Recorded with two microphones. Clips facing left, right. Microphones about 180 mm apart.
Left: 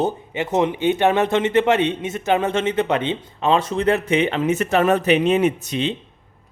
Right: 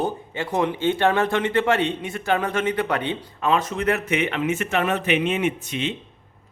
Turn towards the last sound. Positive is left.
turn(degrees=35)  # may be behind; listen again after turning